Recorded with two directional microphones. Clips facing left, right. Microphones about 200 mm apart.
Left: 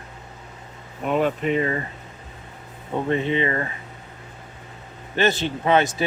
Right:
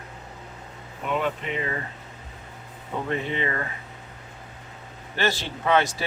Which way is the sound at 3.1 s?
20° left (ahead or behind).